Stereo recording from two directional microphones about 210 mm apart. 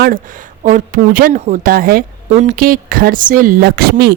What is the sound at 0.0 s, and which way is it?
Speech, 40° right (ahead or behind).